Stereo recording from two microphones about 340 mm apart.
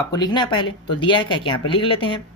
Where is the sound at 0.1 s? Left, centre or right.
Centre.